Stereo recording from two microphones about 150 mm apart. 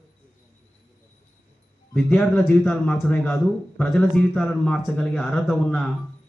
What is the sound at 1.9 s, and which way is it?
Speech, 5° left (ahead or behind).